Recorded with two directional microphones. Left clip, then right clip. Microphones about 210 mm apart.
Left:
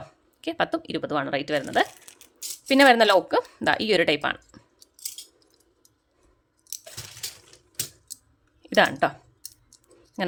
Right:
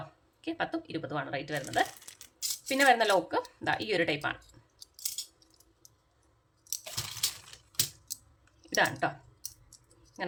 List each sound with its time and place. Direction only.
0.4 s speech: 55° left (ahead or behind)
8.6 s speech: 55° left (ahead or behind)